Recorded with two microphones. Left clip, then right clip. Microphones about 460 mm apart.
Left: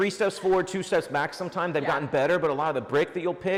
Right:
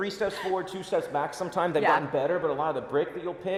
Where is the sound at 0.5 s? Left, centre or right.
Left.